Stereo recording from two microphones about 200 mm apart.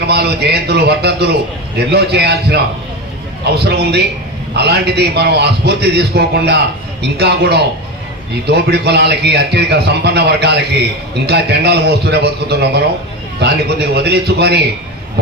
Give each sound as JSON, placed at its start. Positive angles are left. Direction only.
{"t": 0.0, "sound": "a man's voice", "side_deg": -55}